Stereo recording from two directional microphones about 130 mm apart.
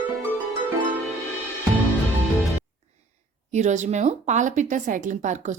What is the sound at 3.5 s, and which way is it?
Speech, 65° right (ahead or behind).